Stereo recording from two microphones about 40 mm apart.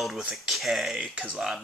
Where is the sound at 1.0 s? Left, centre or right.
Right.